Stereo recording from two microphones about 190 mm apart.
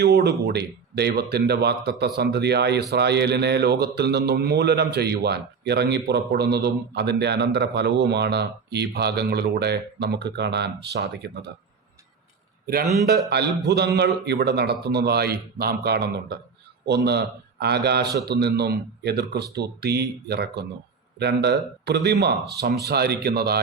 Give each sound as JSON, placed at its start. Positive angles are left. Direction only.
{"t": 0.0, "sound": "a man's voice", "side_deg": -60}
{"t": 13.3, "sound": "a man's voice", "side_deg": -60}